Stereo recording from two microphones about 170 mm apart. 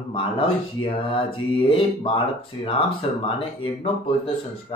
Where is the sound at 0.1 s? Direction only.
30° left (ahead or behind).